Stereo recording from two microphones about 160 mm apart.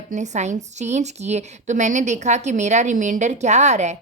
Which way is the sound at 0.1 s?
45° right (ahead or behind).